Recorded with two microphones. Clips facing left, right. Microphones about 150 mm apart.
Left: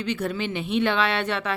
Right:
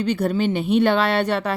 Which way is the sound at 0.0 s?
40° right (ahead or behind).